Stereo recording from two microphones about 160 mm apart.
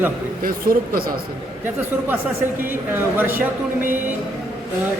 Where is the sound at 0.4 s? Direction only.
65° right (ahead or behind).